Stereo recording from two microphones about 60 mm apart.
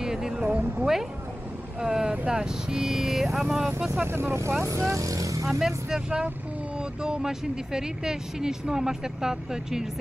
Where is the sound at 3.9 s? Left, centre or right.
Right.